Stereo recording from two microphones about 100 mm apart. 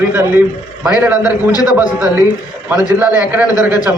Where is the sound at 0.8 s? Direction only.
15° right (ahead or behind).